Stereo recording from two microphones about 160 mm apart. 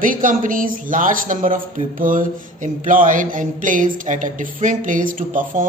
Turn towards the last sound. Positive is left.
turn(degrees=-55)  # may be behind; listen again after turning